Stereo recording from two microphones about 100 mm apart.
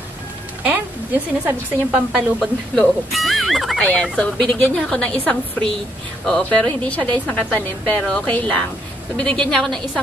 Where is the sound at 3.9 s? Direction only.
10° left (ahead or behind).